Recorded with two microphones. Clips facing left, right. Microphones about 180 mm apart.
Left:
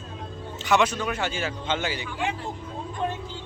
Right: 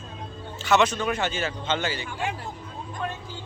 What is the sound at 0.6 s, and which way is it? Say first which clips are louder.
Speech: right 1 dB; 10° left (ahead or behind).